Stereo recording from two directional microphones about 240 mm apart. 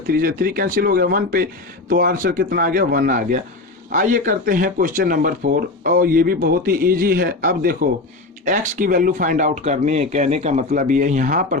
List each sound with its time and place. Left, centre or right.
0.1 s speech: right